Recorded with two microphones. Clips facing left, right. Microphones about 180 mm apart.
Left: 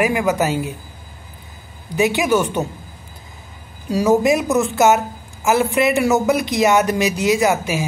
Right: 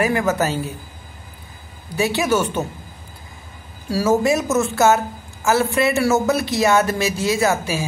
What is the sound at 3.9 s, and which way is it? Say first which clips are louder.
Speech: left 2 dB; 15° left (ahead or behind).